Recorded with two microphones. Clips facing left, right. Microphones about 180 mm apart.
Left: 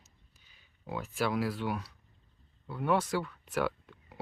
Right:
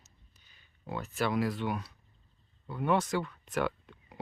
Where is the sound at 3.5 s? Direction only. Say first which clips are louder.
Even; 5° left (ahead or behind).